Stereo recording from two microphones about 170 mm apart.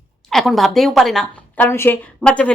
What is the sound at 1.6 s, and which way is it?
Speech, 15° left (ahead or behind).